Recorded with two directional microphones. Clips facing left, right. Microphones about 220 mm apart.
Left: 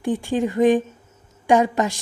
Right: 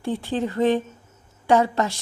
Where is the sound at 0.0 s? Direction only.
15° left (ahead or behind).